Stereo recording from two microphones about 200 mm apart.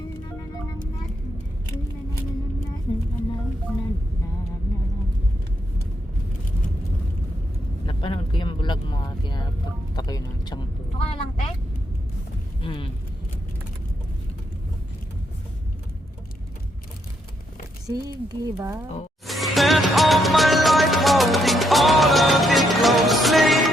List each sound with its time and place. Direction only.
7.9 s vehicle: 25° left (ahead or behind)
9.9 s a sound: 20° left (ahead or behind)
12.6 s vehicle: 25° left (ahead or behind)
17.8 s speech: 20° right (ahead or behind)
19.3 s music: centre (ahead or behind)